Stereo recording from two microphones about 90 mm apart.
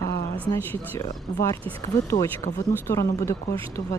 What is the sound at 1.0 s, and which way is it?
Speech, 50° left (ahead or behind).